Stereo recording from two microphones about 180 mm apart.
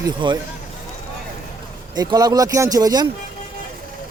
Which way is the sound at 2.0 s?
20° right (ahead or behind).